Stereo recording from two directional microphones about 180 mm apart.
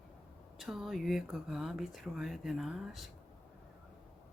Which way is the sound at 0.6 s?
Centre (ahead or behind).